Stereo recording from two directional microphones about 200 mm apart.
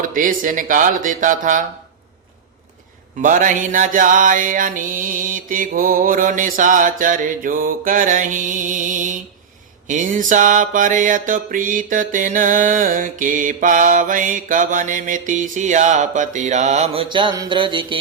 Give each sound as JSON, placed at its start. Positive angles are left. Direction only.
{"t": 0.0, "sound": "music", "side_deg": -45}
{"t": 3.2, "sound": "music", "side_deg": -40}